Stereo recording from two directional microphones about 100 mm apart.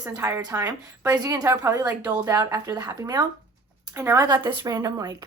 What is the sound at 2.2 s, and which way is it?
A woman's voice, 35° right (ahead or behind).